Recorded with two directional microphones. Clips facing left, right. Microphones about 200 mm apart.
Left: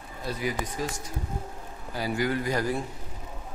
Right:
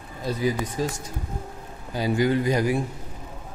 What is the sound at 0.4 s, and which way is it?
Speech, 30° right (ahead or behind).